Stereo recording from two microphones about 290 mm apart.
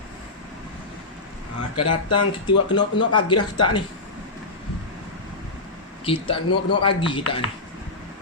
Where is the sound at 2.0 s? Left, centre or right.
Centre.